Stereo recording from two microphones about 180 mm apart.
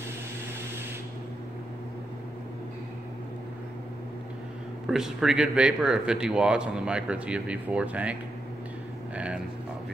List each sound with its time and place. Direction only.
4.8 s speech: 5° right (ahead or behind)